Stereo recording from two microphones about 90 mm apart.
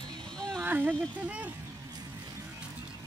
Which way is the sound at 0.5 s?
20° right (ahead or behind).